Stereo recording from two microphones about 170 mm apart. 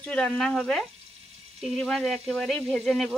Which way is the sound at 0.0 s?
5° left (ahead or behind).